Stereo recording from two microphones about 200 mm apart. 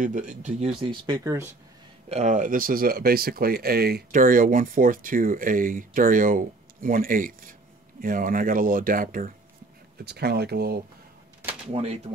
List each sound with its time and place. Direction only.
0.0 s speech: 40° right (ahead or behind); by 1.5 s 15° right (ahead or behind)
2.0 s speech: 35° right (ahead or behind); by 10.8 s 50° right (ahead or behind)
11.7 s speech: 30° right (ahead or behind)